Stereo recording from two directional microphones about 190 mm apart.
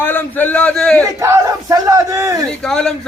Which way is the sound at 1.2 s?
15° right (ahead or behind).